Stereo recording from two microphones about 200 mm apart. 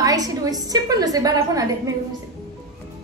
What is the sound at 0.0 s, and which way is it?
A woman's voice, 20° right (ahead or behind).